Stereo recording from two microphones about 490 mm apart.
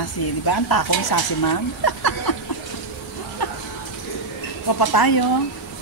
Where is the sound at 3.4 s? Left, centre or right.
Left.